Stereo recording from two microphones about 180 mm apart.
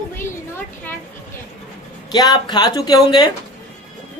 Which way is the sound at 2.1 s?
20° left (ahead or behind).